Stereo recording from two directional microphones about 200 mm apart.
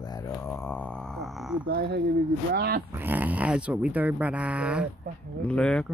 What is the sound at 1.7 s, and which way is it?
Speech, 55° right (ahead or behind).